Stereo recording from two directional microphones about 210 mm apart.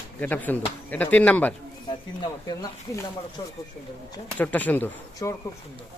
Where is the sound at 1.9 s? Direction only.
20° left (ahead or behind).